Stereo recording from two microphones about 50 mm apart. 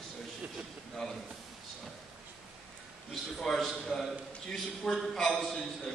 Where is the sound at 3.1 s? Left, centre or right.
Centre.